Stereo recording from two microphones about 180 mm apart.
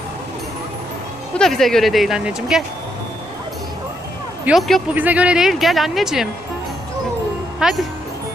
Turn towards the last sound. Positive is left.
turn(degrees=0)  # may be behind; listen again after turning